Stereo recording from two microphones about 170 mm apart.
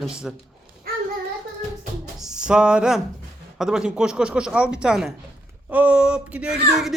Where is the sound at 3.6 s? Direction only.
5° right (ahead or behind).